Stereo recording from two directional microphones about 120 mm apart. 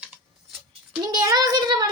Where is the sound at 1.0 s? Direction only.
35° right (ahead or behind).